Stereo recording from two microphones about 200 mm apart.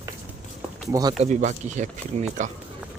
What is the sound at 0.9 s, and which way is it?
Speech, 20° right (ahead or behind).